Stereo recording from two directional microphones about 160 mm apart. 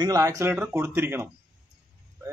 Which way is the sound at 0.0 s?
20° right (ahead or behind).